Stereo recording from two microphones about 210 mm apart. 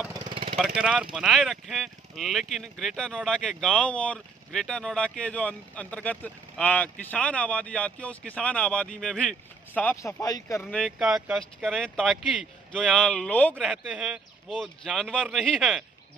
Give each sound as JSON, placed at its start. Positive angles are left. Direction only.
{"t": 0.1, "sound": "vehicle", "side_deg": -25}
{"t": 0.6, "sound": "speech", "side_deg": 0}
{"t": 10.6, "sound": "speech", "side_deg": 5}